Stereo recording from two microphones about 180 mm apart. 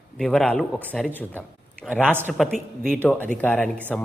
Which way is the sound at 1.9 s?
10° right (ahead or behind).